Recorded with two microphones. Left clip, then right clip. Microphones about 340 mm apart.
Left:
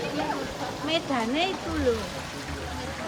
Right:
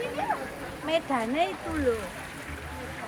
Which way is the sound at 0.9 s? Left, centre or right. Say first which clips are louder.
Even; right.